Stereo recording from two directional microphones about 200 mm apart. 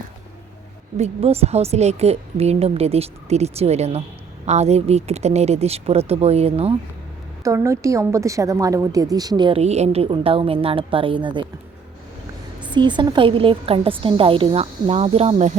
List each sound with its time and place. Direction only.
0.9 s a woman's voice: 30° right (ahead or behind)
7.4 s a woman's voice: 15° right (ahead or behind)
12.7 s a woman's voice: 25° right (ahead or behind)